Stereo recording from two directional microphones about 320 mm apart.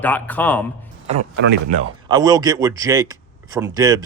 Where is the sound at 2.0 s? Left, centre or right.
Centre.